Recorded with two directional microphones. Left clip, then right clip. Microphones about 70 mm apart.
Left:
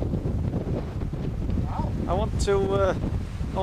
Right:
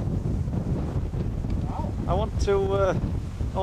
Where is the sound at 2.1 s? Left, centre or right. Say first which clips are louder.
Even; left.